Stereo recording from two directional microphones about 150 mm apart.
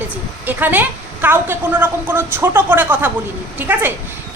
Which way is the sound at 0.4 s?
10° right (ahead or behind).